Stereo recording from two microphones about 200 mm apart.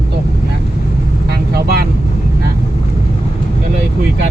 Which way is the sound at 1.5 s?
50° right (ahead or behind).